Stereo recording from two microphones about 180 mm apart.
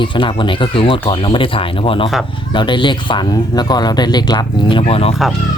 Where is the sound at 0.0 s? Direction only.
30° left (ahead or behind).